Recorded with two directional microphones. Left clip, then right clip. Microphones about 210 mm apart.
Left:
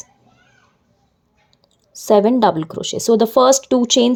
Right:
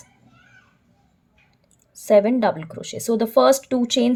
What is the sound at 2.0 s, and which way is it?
A woman's voice, 25° left (ahead or behind).